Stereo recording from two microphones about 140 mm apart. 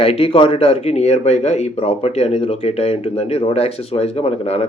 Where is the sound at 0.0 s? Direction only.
45° left (ahead or behind).